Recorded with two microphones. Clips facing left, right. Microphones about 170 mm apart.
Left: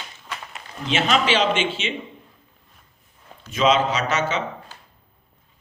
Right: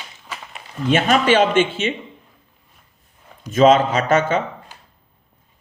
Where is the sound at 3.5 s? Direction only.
45° right (ahead or behind).